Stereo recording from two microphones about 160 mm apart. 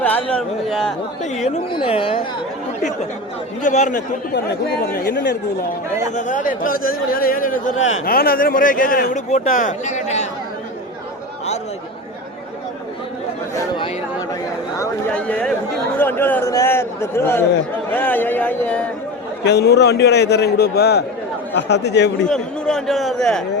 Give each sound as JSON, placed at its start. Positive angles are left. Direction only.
{"t": 0.0, "sound": "a man's voice", "side_deg": 10}
{"t": 1.7, "sound": "speech", "side_deg": 35}
{"t": 3.6, "sound": "speech", "side_deg": 50}
{"t": 5.0, "sound": "a man's voice", "side_deg": 90}
{"t": 6.1, "sound": "speech", "side_deg": 50}
{"t": 9.3, "sound": "speech", "side_deg": 50}
{"t": 13.6, "sound": "speech", "side_deg": 25}
{"t": 15.1, "sound": "a man's voice", "side_deg": 5}
{"t": 19.5, "sound": "a man's voice", "side_deg": 90}
{"t": 22.3, "sound": "a man's voice", "side_deg": 5}